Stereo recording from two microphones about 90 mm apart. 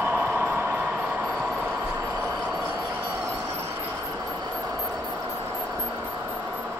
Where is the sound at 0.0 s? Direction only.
10° right (ahead or behind).